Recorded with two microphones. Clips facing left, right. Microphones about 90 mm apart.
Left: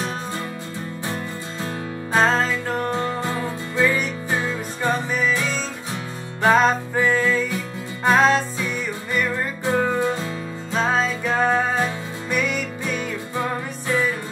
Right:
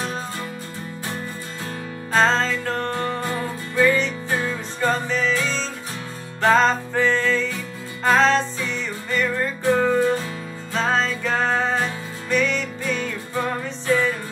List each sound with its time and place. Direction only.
2.1 s music: 10° left (ahead or behind)